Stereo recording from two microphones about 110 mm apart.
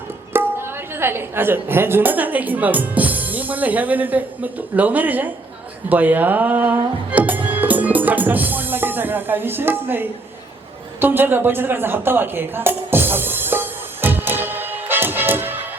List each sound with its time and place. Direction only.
0.3 s speech: 20° right (ahead or behind)
7.6 s music: 15° right (ahead or behind)
11.0 s a sound: 20° right (ahead or behind)